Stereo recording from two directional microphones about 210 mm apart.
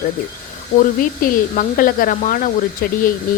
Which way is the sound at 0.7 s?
40° left (ahead or behind).